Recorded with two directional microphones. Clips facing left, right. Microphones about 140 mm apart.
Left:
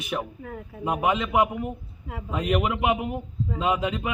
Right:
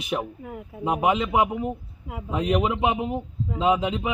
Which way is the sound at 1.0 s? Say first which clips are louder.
Right 1 dB; 25° right (ahead or behind).